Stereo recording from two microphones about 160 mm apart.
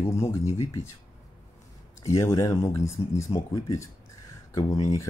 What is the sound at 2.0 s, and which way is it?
Speech, 20° left (ahead or behind).